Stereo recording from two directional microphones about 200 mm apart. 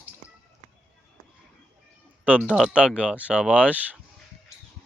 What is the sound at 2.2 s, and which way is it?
Speech, 5° right (ahead or behind).